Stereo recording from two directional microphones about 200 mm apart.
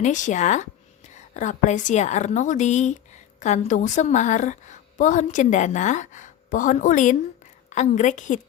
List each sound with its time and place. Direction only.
0.0 s a woman's voice: 40° left (ahead or behind)